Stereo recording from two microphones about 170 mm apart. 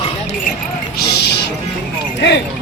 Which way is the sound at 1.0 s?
75° left (ahead or behind).